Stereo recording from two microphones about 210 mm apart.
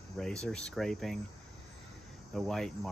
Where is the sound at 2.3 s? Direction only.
Centre (ahead or behind).